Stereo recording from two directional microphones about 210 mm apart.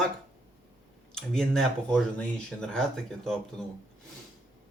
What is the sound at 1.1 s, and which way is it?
Speech, 5° left (ahead or behind).